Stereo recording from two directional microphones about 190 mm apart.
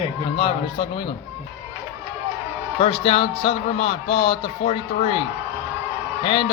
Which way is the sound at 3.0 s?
30° left (ahead or behind).